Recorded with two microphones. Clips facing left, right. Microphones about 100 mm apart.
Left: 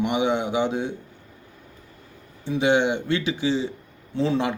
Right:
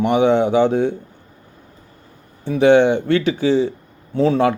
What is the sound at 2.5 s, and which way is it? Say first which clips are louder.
Speech: right 8 dB; 55° right (ahead or behind).